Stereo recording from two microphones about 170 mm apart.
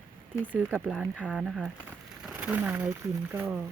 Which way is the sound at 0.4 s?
5° right (ahead or behind).